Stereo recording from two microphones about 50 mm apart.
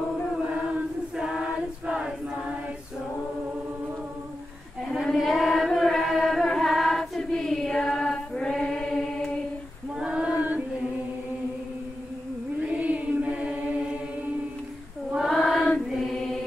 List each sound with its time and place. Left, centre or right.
0.6 s choir: centre
5.1 s chant: centre
9.9 s female singing: centre
12.6 s chant: right
15.2 s chant: centre